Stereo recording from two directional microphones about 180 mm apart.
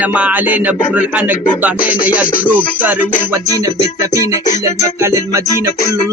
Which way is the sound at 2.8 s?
10° right (ahead or behind).